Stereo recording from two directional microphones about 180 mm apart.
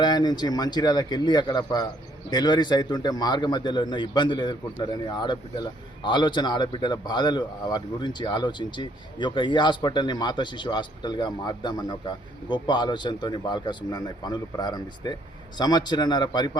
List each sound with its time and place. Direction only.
0.0 s a man's voice: 25° left (ahead or behind)